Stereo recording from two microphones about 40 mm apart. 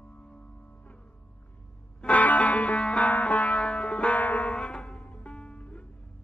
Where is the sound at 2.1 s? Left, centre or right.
Left.